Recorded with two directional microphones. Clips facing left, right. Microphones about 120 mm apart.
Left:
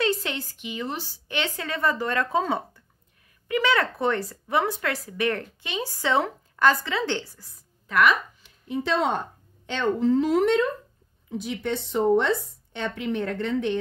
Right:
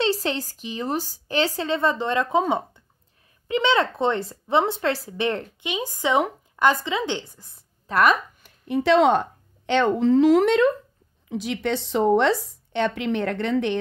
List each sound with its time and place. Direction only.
0.0 s a woman's voice: 35° right (ahead or behind)
7.8 s a woman's voice: 40° right (ahead or behind); by 13.7 s 70° right (ahead or behind)